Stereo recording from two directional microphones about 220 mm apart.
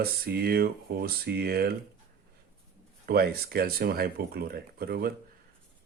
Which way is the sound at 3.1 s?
45° right (ahead or behind).